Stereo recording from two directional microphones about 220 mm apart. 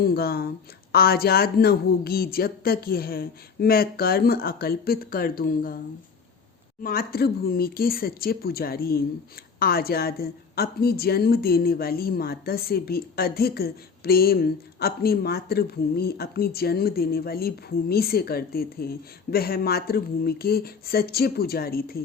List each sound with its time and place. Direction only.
0.0 s a woman's voice: 45° left (ahead or behind)
6.8 s a woman's voice: 40° left (ahead or behind)